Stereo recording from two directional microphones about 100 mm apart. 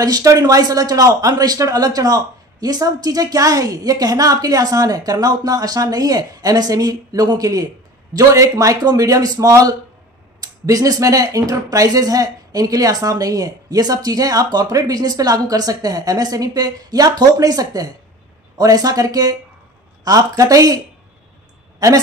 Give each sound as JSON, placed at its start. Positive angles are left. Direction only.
{"t": 0.0, "sound": "a woman's voice", "side_deg": -35}